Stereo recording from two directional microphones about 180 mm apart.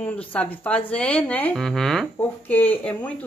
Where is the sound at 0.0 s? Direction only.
10° left (ahead or behind).